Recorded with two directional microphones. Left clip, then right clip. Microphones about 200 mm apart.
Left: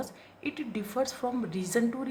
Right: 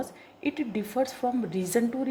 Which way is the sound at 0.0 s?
15° right (ahead or behind).